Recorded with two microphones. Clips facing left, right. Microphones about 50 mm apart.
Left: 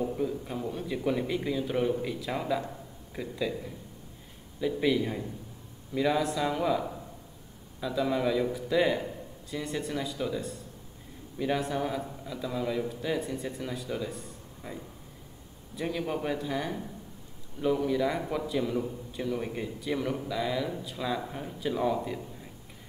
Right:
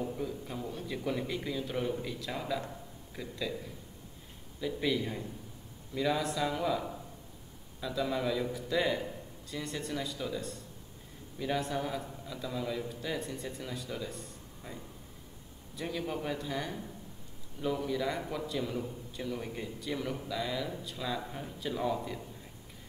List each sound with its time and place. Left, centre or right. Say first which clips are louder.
0.0 s a man's voice: left 6 dB; centre